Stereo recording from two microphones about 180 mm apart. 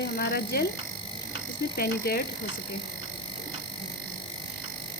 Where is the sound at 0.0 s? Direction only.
65° left (ahead or behind).